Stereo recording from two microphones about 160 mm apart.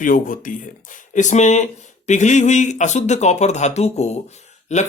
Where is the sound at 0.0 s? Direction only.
60° left (ahead or behind).